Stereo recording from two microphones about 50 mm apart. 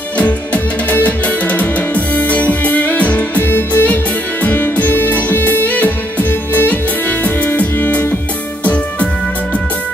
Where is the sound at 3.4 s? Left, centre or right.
Left.